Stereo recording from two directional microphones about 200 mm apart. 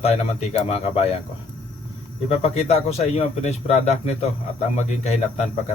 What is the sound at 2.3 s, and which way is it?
Speech, 30° left (ahead or behind).